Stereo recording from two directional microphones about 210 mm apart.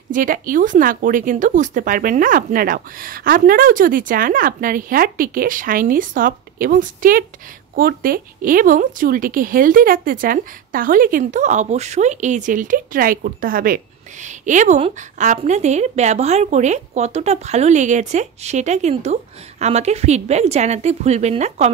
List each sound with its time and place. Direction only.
0.1 s a woman's voice: 40° right (ahead or behind)